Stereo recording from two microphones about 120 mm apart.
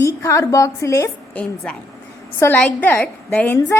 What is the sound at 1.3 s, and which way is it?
Speech, 15° left (ahead or behind).